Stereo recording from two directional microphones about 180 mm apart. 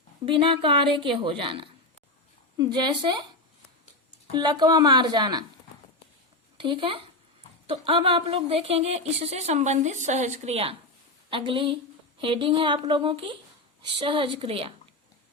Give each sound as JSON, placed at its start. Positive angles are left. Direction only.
{"t": 0.3, "sound": "a woman's voice", "side_deg": -30}
{"t": 4.3, "sound": "a woman's voice", "side_deg": -25}
{"t": 6.6, "sound": "a woman's voice", "side_deg": -25}